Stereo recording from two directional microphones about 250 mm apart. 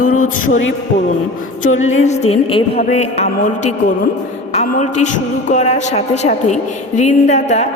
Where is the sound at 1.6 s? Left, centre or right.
Left.